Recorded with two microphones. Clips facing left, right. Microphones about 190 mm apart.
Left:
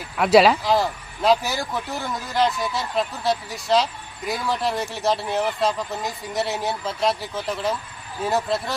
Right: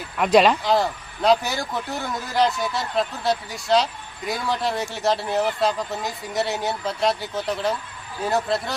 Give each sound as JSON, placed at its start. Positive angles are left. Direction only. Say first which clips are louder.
{"t": 0.2, "sound": "speech", "louder": "left 1 dB", "side_deg": 5}